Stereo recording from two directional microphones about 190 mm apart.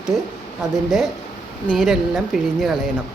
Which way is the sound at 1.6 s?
Centre (ahead or behind).